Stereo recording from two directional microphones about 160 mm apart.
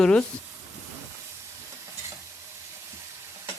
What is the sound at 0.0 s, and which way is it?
Speech, 5° left (ahead or behind).